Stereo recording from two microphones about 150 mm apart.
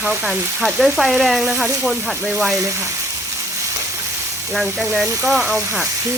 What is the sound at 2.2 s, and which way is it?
Speech, 15° right (ahead or behind).